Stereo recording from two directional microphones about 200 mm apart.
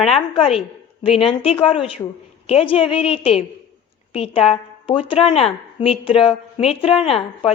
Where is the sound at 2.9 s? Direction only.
30° left (ahead or behind).